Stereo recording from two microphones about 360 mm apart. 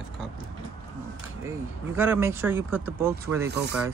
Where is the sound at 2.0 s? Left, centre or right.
Centre.